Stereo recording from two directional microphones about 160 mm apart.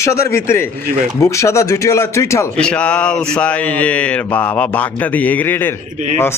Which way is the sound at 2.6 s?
5° left (ahead or behind).